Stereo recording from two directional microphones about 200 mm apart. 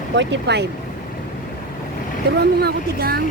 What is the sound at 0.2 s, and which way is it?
Speech, 60° right (ahead or behind).